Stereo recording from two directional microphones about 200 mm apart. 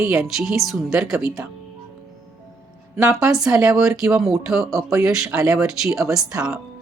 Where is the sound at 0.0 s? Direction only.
5° right (ahead or behind).